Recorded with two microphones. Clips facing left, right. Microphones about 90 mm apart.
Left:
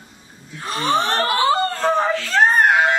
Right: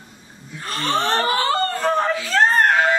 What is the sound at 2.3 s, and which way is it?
Screaming, 5° left (ahead or behind).